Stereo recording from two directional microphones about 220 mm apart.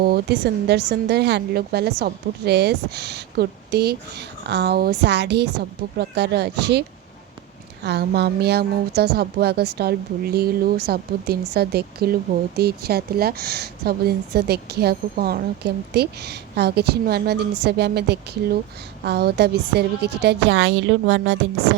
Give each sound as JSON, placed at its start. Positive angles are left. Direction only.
{"t": 0.0, "sound": "a woman's voice", "side_deg": -45}
{"t": 7.9, "sound": "a woman's voice", "side_deg": -50}